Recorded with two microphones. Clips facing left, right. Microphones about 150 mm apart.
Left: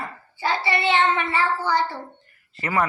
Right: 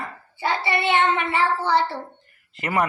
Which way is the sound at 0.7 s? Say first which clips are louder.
Even; 55° right (ahead or behind).